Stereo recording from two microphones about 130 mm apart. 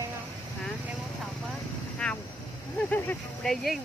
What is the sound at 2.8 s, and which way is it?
Speech, 15° left (ahead or behind).